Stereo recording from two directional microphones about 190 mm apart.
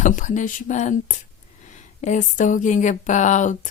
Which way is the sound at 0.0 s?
40° left (ahead or behind).